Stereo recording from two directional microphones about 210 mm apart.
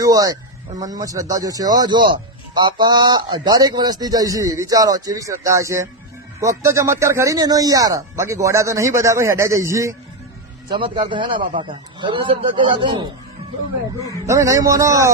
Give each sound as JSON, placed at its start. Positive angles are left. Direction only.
{"t": 0.0, "sound": "a man's voice", "side_deg": -15}
{"t": 14.3, "sound": "speech", "side_deg": -15}